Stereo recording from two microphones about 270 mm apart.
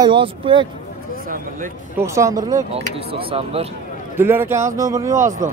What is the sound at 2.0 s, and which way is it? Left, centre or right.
Speech, centre.